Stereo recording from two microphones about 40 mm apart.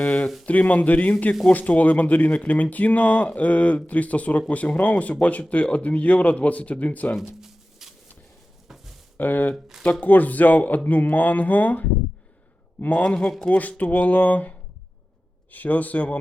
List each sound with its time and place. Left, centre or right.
0.0 s speech: left
7.2 s a sound: centre
9.1 s speech: left
15.5 s speech: left